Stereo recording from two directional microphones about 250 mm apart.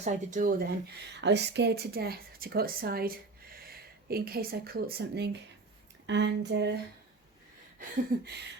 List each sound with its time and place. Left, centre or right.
0.0 s speech: right
7.8 s speech: right